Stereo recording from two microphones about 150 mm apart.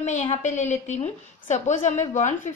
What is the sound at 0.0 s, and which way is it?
A woman's voice, 50° left (ahead or behind).